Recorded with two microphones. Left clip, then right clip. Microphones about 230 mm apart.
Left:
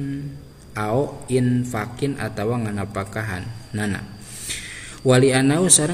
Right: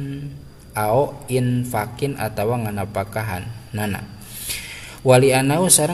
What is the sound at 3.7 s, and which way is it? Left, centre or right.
Mantra, centre.